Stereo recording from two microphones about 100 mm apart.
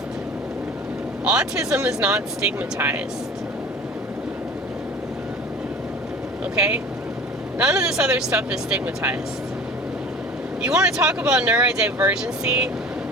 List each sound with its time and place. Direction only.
1.2 s speech: 10° right (ahead or behind)
7.6 s speech: 10° right (ahead or behind)
10.7 s speech: 5° right (ahead or behind)